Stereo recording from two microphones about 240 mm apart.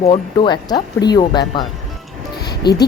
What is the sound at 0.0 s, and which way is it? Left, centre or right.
Speech, left.